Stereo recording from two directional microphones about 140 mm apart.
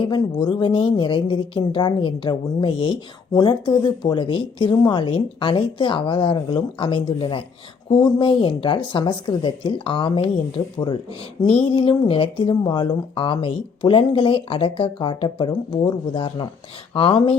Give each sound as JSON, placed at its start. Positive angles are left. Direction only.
{"t": 0.0, "sound": "a woman's voice", "side_deg": 35}